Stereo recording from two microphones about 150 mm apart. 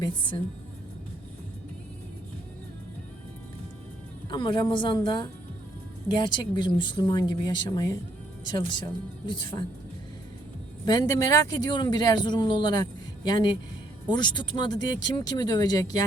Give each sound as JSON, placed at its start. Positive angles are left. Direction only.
{"t": 0.0, "sound": "speech", "side_deg": 35}
{"t": 4.3, "sound": "speech", "side_deg": 30}
{"t": 10.8, "sound": "speech", "side_deg": 25}